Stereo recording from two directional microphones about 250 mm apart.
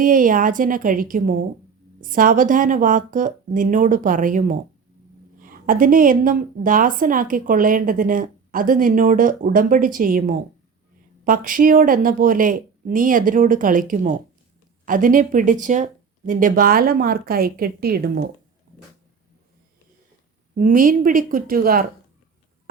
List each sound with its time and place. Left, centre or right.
0.0 s a woman's voice: right
20.6 s a woman's voice: right